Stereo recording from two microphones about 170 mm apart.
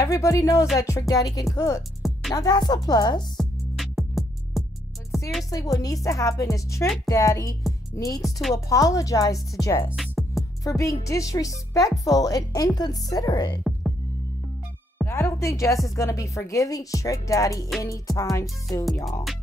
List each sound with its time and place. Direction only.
0.0 s speech: 20° left (ahead or behind)
3.3 s music: centre (ahead or behind)
5.5 s speech: 20° left (ahead or behind)
8.2 s speech: centre (ahead or behind)
8.5 s speech: 20° left (ahead or behind)
9.8 s music: centre (ahead or behind)
10.6 s speech: 20° left (ahead or behind)
15.0 s speech: 15° left (ahead or behind)